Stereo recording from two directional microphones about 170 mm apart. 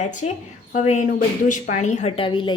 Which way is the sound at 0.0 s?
45° left (ahead or behind).